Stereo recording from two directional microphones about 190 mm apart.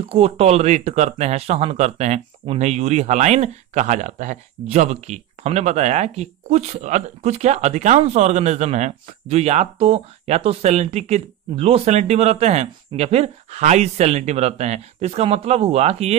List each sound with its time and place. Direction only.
0.1 s speech: 30° right (ahead or behind)